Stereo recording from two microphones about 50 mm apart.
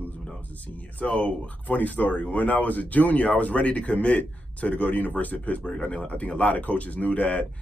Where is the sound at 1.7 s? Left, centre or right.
Left.